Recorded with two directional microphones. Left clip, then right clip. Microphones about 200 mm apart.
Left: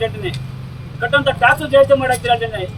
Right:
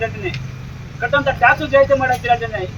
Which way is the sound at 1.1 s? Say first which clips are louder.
Left 1 dB; 5° left (ahead or behind).